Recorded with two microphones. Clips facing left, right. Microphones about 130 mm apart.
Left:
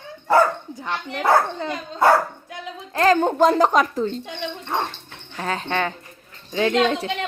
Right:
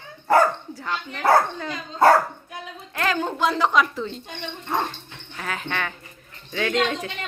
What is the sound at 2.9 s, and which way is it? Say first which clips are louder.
Speech: left 8 dB; 35° left (ahead or behind).